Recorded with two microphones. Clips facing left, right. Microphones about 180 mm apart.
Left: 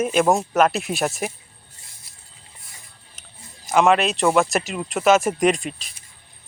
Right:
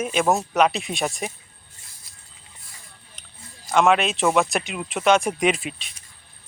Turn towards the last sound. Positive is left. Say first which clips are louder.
# left 3 dB
turn(degrees=0)  # may be behind; listen again after turning